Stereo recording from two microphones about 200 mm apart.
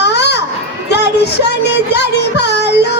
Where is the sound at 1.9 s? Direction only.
55° left (ahead or behind).